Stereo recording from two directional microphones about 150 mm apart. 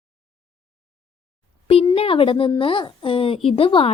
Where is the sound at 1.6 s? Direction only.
40° left (ahead or behind).